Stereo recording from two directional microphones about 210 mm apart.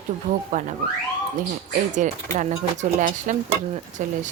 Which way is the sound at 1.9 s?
35° right (ahead or behind).